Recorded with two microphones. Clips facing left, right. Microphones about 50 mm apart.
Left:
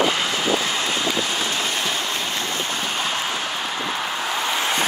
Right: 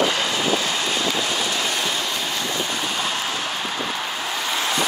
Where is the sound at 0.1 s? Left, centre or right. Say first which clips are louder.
Even; centre.